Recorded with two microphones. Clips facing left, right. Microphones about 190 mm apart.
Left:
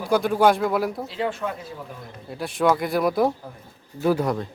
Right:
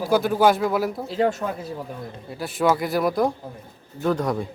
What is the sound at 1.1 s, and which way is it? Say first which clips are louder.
Speech: right 5 dB; 45° right (ahead or behind).